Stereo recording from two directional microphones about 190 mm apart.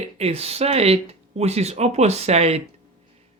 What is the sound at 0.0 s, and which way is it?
Speech, 30° right (ahead or behind).